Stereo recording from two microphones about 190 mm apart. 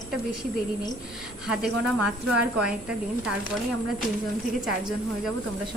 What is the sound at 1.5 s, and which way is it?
A woman's voice, 5° right (ahead or behind).